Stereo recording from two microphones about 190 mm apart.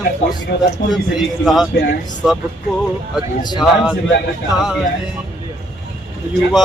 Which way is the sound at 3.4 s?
20° left (ahead or behind).